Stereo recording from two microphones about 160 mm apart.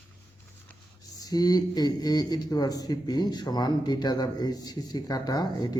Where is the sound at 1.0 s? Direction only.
25° left (ahead or behind).